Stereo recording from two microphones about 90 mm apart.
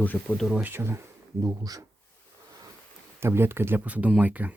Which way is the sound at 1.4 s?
40° right (ahead or behind).